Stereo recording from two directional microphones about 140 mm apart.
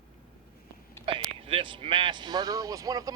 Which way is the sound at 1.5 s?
40° right (ahead or behind).